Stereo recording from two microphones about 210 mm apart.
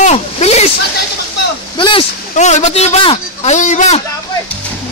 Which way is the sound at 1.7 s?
25° left (ahead or behind).